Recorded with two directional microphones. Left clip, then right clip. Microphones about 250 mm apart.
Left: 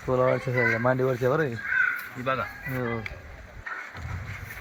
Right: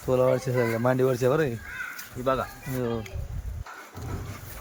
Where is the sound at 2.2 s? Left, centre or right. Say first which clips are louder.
Right 2 dB; right.